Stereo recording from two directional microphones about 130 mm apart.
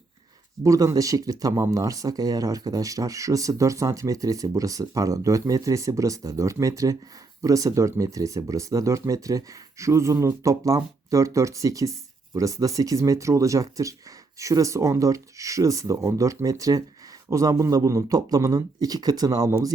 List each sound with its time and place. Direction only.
0.6 s speech: 25° right (ahead or behind)